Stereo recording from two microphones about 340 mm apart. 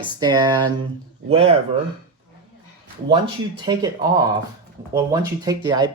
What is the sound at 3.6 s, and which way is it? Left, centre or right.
Speech, centre.